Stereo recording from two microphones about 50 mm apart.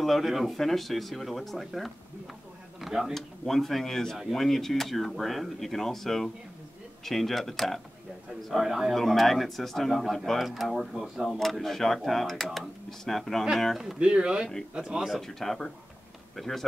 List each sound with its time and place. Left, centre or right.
0.0 s speech: centre
2.9 s speech: centre
3.2 s speech: centre
13.9 s speech: right
15.0 s speech: centre